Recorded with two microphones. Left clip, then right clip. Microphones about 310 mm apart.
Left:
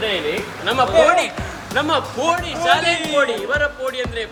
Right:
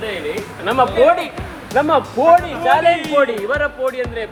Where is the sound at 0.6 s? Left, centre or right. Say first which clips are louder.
Right 1 dB; centre.